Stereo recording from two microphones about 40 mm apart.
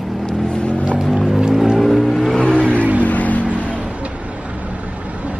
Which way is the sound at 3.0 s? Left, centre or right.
Left.